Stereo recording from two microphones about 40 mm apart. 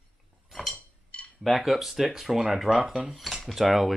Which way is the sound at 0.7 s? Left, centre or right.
Left.